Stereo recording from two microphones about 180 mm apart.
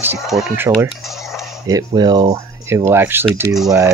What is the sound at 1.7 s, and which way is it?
Speech, 20° right (ahead or behind).